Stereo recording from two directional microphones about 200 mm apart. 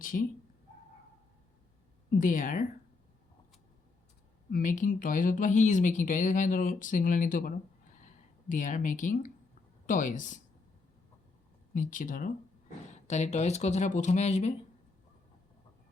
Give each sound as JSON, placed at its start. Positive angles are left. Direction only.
{"t": 0.0, "sound": "speech", "side_deg": 45}
{"t": 2.0, "sound": "speech", "side_deg": 40}
{"t": 4.5, "sound": "speech", "side_deg": 40}
{"t": 11.7, "sound": "speech", "side_deg": 40}